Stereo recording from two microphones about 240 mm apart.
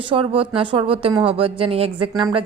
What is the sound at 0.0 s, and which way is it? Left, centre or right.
Speech, right.